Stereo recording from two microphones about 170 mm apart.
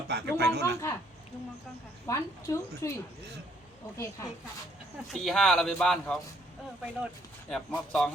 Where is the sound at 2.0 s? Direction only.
15° left (ahead or behind).